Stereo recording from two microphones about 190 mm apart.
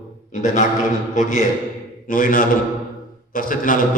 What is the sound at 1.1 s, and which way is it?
A man's voice, 40° left (ahead or behind).